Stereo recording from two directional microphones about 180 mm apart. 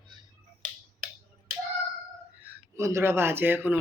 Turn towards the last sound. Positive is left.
turn(degrees=-10)  # may be behind; listen again after turning